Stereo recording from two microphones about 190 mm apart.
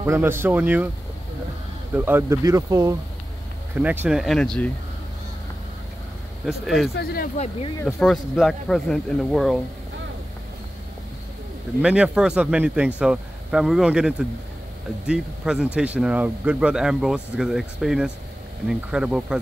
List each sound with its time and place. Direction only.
0.0 s speech: 10° right (ahead or behind)
2.0 s speech: 10° right (ahead or behind)
6.4 s speech: centre (ahead or behind)
6.9 s speech: 55° left (ahead or behind)
7.8 s speech: centre (ahead or behind)
11.8 s speech: 5° right (ahead or behind)